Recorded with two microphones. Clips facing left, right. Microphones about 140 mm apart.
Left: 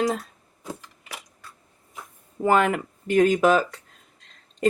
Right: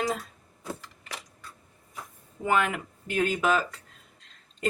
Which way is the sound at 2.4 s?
40° left (ahead or behind).